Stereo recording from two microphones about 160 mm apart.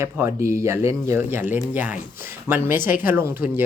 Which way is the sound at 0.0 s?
15° right (ahead or behind).